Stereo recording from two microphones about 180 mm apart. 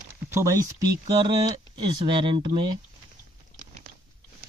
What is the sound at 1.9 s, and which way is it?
Speech, 25° right (ahead or behind).